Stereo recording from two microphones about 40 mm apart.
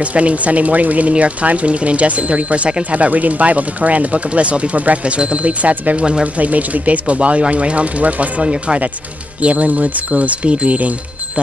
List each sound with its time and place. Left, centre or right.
0.0 s speech: right